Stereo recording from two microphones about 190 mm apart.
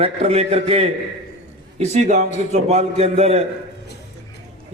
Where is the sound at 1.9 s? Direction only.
35° right (ahead or behind).